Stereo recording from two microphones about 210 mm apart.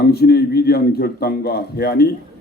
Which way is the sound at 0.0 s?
50° left (ahead or behind).